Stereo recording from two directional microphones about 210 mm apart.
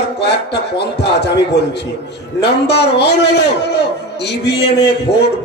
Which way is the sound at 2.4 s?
50° left (ahead or behind).